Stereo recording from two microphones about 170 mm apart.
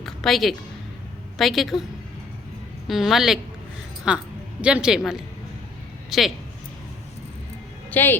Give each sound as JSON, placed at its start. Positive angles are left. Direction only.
{"t": 0.0, "sound": "a sound", "side_deg": 0}
{"t": 1.4, "sound": "a woman's voice", "side_deg": 0}
{"t": 2.8, "sound": "a woman's voice", "side_deg": 0}
{"t": 7.9, "sound": "speech", "side_deg": 10}